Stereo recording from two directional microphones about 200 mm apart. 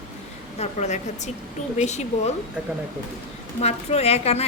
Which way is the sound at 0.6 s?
35° left (ahead or behind).